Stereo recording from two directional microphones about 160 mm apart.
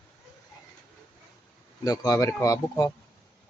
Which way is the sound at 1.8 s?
20° left (ahead or behind).